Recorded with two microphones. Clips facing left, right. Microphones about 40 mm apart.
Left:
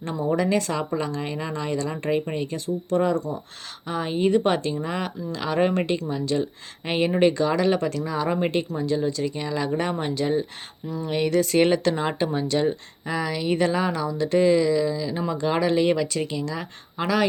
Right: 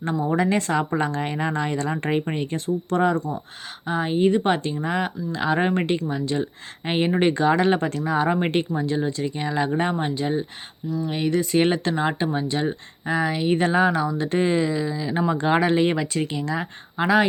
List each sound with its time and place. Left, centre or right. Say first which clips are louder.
0.3 s speech: right 2 dB; right
3.8 s speech: right 3 dB; centre; by 8.3 s right
8.3 s speech: right 2 dB; right
10.0 s speech: even; centre
13.1 s speech: right 3 dB; right
15.3 s speech: right 2 dB; right